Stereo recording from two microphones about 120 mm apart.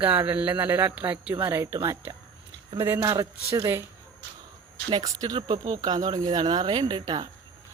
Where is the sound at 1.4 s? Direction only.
20° right (ahead or behind).